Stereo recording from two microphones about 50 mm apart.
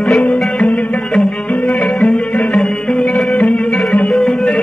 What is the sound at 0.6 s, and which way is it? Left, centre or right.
Music, left.